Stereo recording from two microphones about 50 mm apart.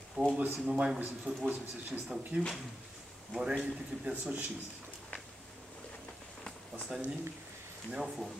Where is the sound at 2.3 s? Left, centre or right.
Right.